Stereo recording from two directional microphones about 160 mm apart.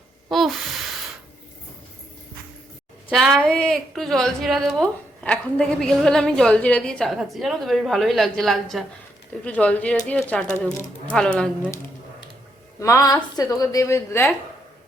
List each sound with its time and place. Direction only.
0.3 s a sound: centre (ahead or behind)
3.1 s speech: 5° left (ahead or behind)
12.8 s a woman's voice: 20° left (ahead or behind)